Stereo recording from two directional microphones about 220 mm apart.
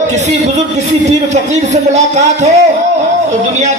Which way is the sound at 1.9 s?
30° right (ahead or behind).